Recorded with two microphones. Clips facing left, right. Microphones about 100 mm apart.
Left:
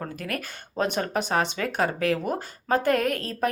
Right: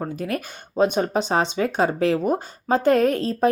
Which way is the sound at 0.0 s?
20° right (ahead or behind).